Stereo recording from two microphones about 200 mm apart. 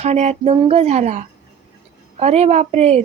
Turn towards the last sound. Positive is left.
turn(degrees=-30)  # may be behind; listen again after turning